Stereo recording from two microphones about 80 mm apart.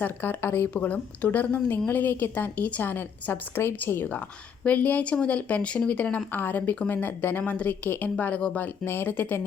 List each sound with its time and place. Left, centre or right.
0.0 s speech: left